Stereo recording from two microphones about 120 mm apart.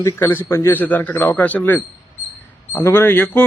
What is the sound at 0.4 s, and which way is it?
A man's voice, 20° left (ahead or behind).